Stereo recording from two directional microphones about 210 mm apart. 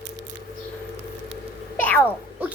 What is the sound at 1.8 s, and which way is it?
Speech, 5° left (ahead or behind).